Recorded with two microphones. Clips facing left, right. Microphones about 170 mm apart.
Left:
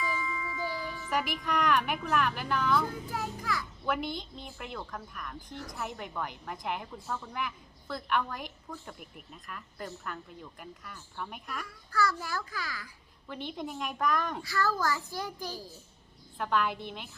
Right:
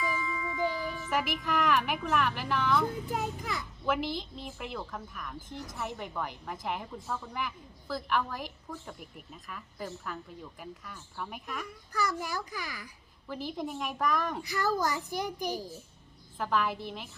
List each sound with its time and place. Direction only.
0.0 s ding: centre (ahead or behind)
0.7 s speech: centre (ahead or behind)
2.8 s a child's voice: 20° right (ahead or behind)
3.8 s a woman's voice: centre (ahead or behind)
11.9 s a child's voice: 15° right (ahead or behind)
13.2 s a woman's voice: centre (ahead or behind)
14.4 s a child's voice: 15° right (ahead or behind)
16.4 s a woman's voice: centre (ahead or behind)